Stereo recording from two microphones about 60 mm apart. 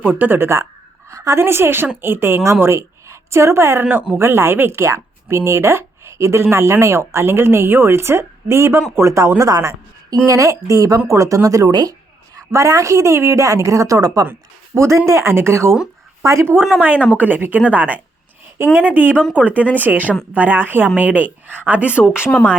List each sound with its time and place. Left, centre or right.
0.0 s a woman's voice: right
4.9 s a sound: right
5.4 s speech: right
9.0 s a woman's voice: right
12.4 s a woman's voice: right
14.8 s speech: right
16.8 s speech: right